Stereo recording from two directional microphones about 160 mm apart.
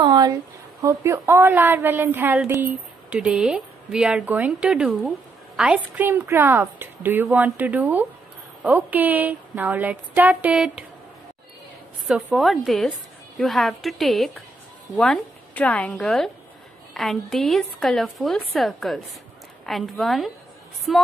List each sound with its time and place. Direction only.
0.0 s a sound: 25° right (ahead or behind)
0.8 s a woman's voice: 15° right (ahead or behind)
12.1 s a woman's voice: centre (ahead or behind)